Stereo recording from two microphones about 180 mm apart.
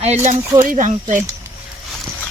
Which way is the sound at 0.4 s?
15° right (ahead or behind).